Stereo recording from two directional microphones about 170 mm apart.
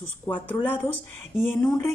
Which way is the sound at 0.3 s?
10° left (ahead or behind).